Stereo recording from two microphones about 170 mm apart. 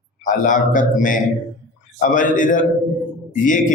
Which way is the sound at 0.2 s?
50° left (ahead or behind).